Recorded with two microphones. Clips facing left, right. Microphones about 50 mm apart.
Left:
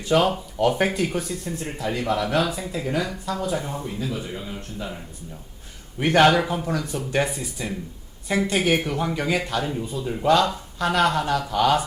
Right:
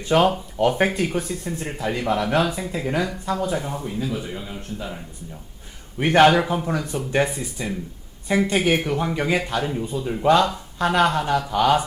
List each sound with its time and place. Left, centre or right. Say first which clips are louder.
0.0 s speech: right 2 dB; right
3.8 s a man's voice: right 2 dB; centre
6.0 s speech: right 2 dB; right
8.8 s speech: right 2 dB; centre
10.2 s speech: right 2 dB; right